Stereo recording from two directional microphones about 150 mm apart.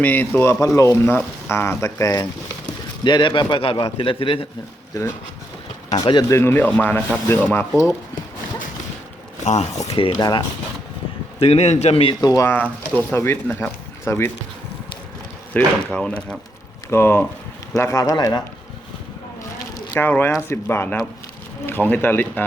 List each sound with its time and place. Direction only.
0.0 s a man's voice: 10° left (ahead or behind); by 4.4 s 35° left (ahead or behind)
4.9 s speech: 25° left (ahead or behind)
9.4 s a man's voice: 50° left (ahead or behind)
10.2 s speech: 25° left (ahead or behind)
11.3 s a man's voice: 40° left (ahead or behind)
12.2 s speech: 25° left (ahead or behind)
15.5 s speech: 5° left (ahead or behind); by 18.4 s 25° left (ahead or behind)
19.9 s speech: 10° left (ahead or behind)